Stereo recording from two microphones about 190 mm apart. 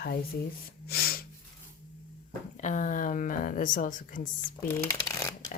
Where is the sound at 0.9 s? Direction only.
55° left (ahead or behind).